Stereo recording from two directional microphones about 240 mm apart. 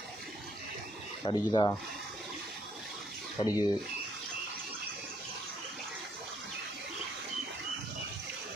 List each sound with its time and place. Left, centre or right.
1.2 s speech: centre
3.3 s speech: centre